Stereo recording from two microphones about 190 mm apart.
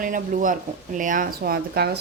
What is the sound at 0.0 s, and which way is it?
A woman's voice, 45° right (ahead or behind).